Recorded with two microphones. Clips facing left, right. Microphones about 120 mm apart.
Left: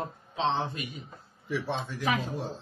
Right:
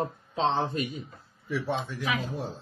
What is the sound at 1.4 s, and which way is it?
Speech, centre (ahead or behind).